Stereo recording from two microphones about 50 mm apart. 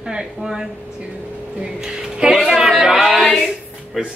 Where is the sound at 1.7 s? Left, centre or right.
Centre.